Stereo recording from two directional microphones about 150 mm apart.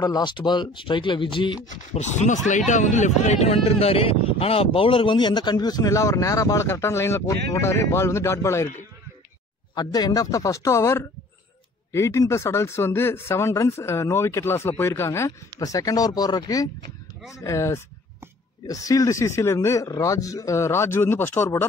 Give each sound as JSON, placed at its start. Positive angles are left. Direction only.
{"t": 0.0, "sound": "speech", "side_deg": 30}
{"t": 1.7, "sound": "speech", "side_deg": 55}
{"t": 9.8, "sound": "speech", "side_deg": 25}